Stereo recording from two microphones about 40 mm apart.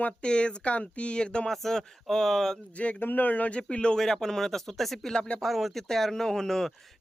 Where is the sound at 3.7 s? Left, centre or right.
Left; by 5.1 s centre.